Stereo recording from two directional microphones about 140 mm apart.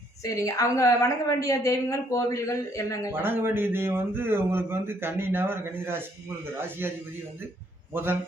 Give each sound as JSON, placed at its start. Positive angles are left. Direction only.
{"t": 0.3, "sound": "a woman's voice", "side_deg": 20}
{"t": 3.1, "sound": "speech", "side_deg": -15}
{"t": 7.9, "sound": "speech", "side_deg": -15}